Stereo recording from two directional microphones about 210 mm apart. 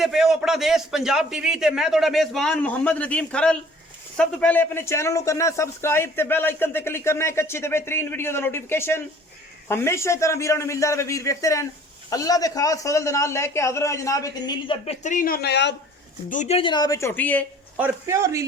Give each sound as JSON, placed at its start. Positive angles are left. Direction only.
{"t": 0.0, "sound": "a man's voice", "side_deg": 0}
{"t": 16.3, "sound": "speech", "side_deg": 30}
{"t": 17.7, "sound": "speech", "side_deg": -10}